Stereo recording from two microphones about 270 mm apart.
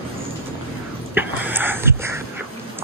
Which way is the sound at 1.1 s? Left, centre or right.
Centre.